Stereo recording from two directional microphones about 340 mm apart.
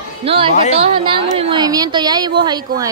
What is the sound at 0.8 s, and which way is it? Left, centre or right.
A woman's voice, centre.